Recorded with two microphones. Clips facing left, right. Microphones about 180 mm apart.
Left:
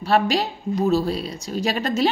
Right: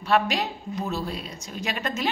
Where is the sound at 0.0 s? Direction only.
35° left (ahead or behind).